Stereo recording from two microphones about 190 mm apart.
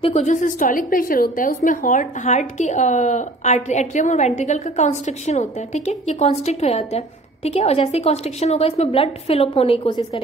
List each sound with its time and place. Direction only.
0.0 s a woman's voice: 35° left (ahead or behind)